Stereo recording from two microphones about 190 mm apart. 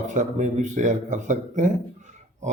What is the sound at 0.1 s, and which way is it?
A man's voice, 40° right (ahead or behind).